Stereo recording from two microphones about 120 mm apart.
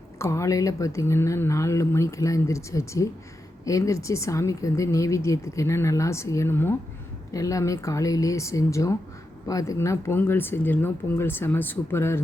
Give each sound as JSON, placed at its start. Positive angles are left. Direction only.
{"t": 0.2, "sound": "speech", "side_deg": 25}